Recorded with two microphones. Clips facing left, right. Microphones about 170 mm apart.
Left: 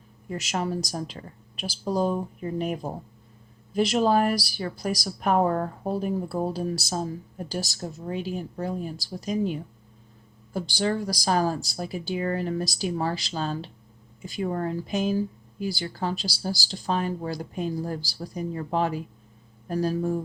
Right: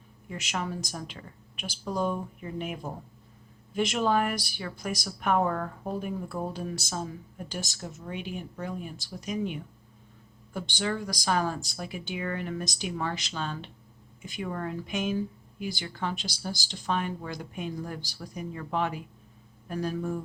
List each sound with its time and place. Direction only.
0.3 s a woman's voice: 35° left (ahead or behind)